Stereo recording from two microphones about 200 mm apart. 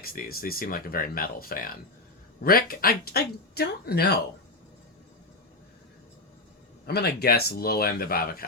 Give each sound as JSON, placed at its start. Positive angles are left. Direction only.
{"t": 0.0, "sound": "speech", "side_deg": 50}
{"t": 6.8, "sound": "speech", "side_deg": 55}